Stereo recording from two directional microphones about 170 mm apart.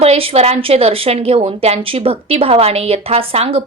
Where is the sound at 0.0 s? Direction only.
35° right (ahead or behind).